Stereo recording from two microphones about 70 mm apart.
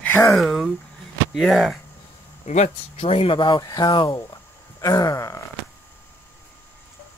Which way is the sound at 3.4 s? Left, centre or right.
Left.